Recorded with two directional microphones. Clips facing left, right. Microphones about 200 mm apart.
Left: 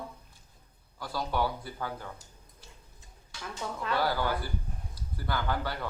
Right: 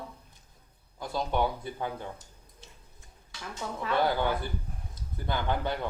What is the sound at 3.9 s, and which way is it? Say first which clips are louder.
A man's voice: right 3 dB; 20° right (ahead or behind).